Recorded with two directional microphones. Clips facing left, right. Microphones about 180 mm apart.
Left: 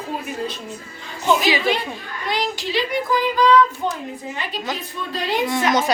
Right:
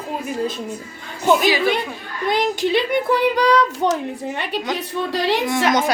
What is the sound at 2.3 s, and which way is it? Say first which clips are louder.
Child singing: right 6 dB; 50° right (ahead or behind).